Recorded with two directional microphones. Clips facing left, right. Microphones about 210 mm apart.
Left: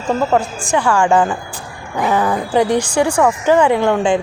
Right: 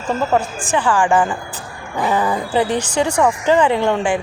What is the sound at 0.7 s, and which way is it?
Speech, 10° left (ahead or behind).